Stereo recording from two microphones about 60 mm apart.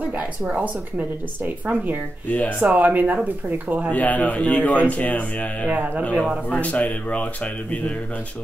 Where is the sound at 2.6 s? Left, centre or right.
Right.